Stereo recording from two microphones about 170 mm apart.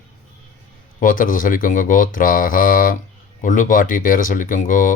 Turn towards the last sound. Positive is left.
turn(degrees=50)  # may be behind; listen again after turning